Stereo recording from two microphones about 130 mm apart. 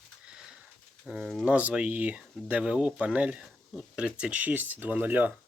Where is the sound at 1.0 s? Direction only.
5° right (ahead or behind).